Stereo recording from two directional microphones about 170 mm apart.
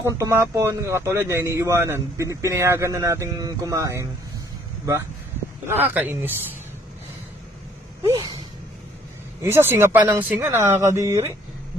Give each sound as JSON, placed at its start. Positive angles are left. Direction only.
{"t": 0.0, "sound": "a man's voice", "side_deg": -15}
{"t": 5.6, "sound": "a man's voice", "side_deg": -10}
{"t": 9.4, "sound": "a man's voice", "side_deg": -15}